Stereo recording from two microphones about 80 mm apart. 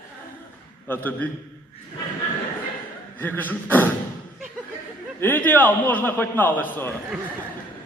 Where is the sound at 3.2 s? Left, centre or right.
Left.